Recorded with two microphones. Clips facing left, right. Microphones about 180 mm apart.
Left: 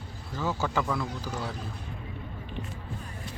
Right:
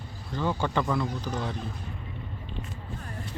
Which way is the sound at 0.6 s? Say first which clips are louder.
Right 1 dB; 5° left (ahead or behind).